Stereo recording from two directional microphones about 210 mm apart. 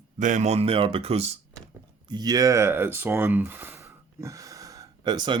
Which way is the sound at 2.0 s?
20° right (ahead or behind).